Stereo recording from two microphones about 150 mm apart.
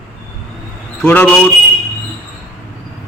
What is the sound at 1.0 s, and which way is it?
Speech, 10° left (ahead or behind).